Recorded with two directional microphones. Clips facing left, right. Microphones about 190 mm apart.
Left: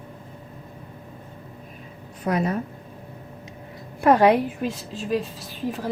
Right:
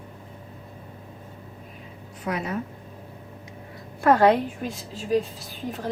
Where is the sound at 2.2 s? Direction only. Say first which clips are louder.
Left 5 dB; 40° left (ahead or behind).